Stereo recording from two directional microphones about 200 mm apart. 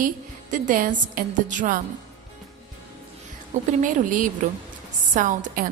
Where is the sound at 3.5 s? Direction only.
35° right (ahead or behind).